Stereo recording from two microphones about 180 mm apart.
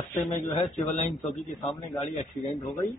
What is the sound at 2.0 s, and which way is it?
Speech, 35° left (ahead or behind).